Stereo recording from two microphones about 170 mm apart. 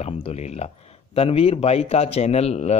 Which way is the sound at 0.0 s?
40° left (ahead or behind).